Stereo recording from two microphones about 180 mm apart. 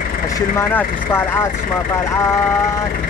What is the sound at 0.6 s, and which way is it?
Speech, 10° left (ahead or behind).